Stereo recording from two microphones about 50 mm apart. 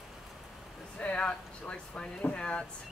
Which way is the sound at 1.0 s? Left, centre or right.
Left.